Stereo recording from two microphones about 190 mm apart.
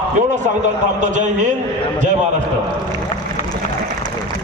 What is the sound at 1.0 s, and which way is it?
Speech, 40° right (ahead or behind).